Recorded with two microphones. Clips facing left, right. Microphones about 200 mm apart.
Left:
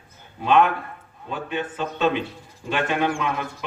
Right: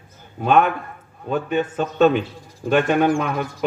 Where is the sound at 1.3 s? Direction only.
45° right (ahead or behind).